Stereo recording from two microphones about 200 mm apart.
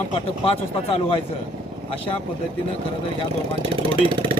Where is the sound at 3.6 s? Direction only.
25° right (ahead or behind).